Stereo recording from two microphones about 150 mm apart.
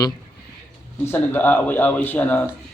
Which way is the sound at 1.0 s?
15° left (ahead or behind).